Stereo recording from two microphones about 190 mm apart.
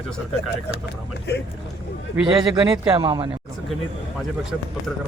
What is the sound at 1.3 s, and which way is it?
Speech, 60° left (ahead or behind).